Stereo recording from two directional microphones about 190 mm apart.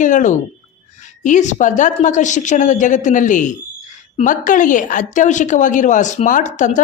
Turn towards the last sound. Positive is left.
turn(degrees=40)  # may be behind; listen again after turning